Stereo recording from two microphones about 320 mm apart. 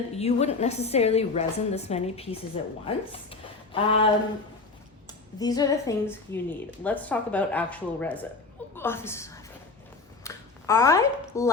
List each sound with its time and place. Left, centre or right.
0.2 s a woman's voice: centre
5.4 s a woman's voice: centre
10.2 s a sound: centre